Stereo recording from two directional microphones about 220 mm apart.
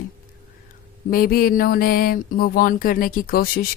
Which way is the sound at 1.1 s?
40° left (ahead or behind).